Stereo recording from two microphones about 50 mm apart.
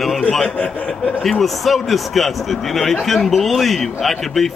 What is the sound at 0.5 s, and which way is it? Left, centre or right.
Speech, left.